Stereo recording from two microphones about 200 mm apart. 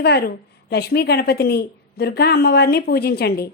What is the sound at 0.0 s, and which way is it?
A woman's voice, 55° left (ahead or behind).